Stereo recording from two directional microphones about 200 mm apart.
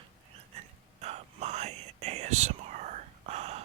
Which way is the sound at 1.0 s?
30° right (ahead or behind).